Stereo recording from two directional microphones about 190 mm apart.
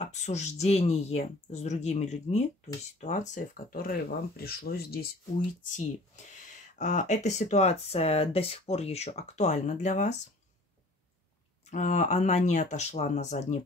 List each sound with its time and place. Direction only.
0.0 s speech: 35° left (ahead or behind); by 5.1 s 55° left (ahead or behind)
5.6 s speech: 40° left (ahead or behind)
11.7 s speech: 40° left (ahead or behind)